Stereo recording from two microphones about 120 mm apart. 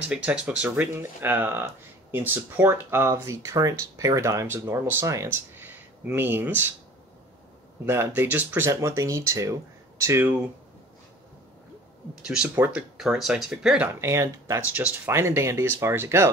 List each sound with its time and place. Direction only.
0.1 s speech: 10° right (ahead or behind)
7.8 s speech: 20° right (ahead or behind)
12.5 s speech: 15° right (ahead or behind)
12.9 s speech: 5° right (ahead or behind)
14.0 s speech: 25° right (ahead or behind)